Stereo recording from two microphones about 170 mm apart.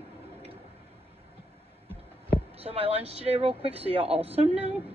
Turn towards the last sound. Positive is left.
turn(degrees=-35)  # may be behind; listen again after turning